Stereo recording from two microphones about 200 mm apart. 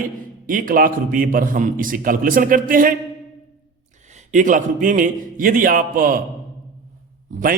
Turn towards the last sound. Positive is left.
turn(degrees=-45)  # may be behind; listen again after turning